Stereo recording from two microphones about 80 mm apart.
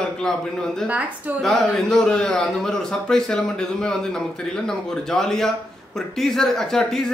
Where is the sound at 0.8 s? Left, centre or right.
Centre.